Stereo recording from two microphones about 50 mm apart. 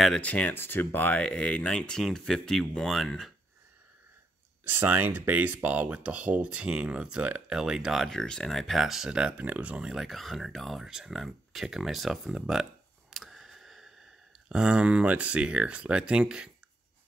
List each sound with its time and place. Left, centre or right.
0.2 s speech: left
0.5 s speech: left
1.0 s speech: left; by 3.3 s centre
4.6 s speech: right
6.6 s speech: centre
8.1 s speech: centre
9.1 s speech: centre
9.9 s speech: centre
13.1 s a sound: centre
14.5 s speech: right